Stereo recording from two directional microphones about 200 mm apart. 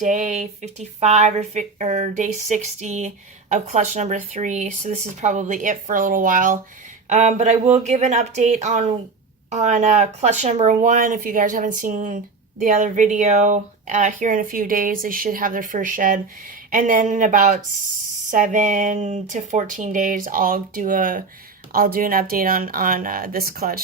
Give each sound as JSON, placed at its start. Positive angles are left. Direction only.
{"t": 0.0, "sound": "speech", "side_deg": -40}